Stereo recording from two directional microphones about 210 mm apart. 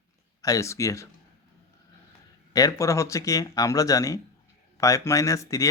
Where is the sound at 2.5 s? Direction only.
15° left (ahead or behind).